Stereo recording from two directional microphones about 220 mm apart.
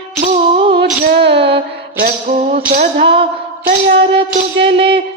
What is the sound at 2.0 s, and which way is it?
Music, 35° right (ahead or behind).